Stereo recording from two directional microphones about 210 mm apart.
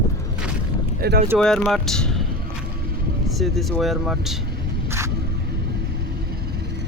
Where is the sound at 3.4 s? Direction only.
Centre (ahead or behind).